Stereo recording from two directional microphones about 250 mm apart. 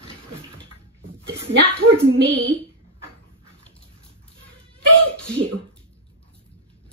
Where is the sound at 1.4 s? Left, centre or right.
Right.